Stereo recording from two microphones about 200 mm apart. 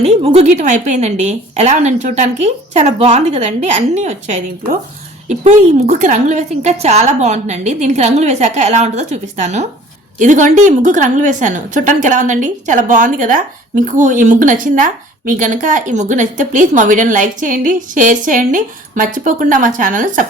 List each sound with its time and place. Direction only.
0.0 s a woman's voice: 30° right (ahead or behind)